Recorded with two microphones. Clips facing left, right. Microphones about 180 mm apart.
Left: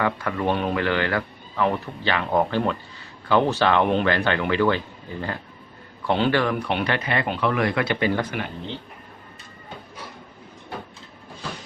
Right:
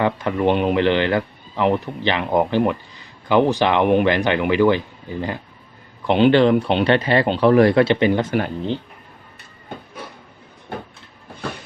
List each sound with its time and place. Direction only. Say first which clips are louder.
0.0 s speech: right 5 dB; 20° right (ahead or behind)
6.1 s speech: right 7 dB; 20° right (ahead or behind)